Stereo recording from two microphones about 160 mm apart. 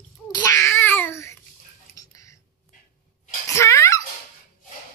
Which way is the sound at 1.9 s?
20° left (ahead or behind).